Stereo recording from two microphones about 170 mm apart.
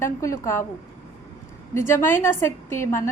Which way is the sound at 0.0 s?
15° left (ahead or behind).